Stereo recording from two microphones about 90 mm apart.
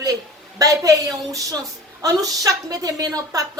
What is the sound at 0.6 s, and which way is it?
A woman's voice, 40° right (ahead or behind).